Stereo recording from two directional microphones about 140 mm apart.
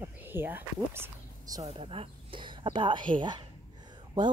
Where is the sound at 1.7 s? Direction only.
40° right (ahead or behind).